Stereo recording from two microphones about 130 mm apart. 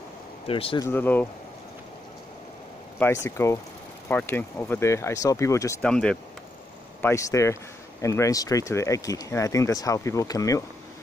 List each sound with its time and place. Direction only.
0.5 s speech: 45° left (ahead or behind)
0.7 s speech: 15° left (ahead or behind)
3.0 s speech: 20° left (ahead or behind)
5.8 s speech: 5° left (ahead or behind)
7.0 s speech: 20° left (ahead or behind)